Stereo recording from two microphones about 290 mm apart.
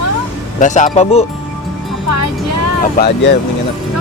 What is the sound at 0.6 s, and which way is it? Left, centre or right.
Speech, left.